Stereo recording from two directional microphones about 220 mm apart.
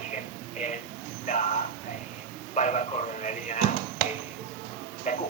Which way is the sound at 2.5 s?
35° left (ahead or behind).